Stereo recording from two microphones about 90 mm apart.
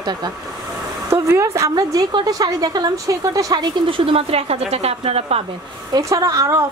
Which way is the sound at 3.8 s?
85° right.